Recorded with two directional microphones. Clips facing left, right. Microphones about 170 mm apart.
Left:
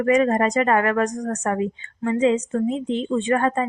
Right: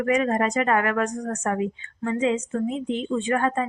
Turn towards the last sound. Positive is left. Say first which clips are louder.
# left 3 dB
turn(degrees=35)  # may be behind; listen again after turning